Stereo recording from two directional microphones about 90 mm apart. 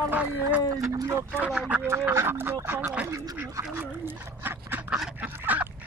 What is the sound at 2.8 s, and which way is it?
Speech, 15° right (ahead or behind).